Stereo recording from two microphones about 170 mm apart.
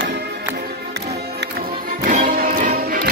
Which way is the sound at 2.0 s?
50° right (ahead or behind).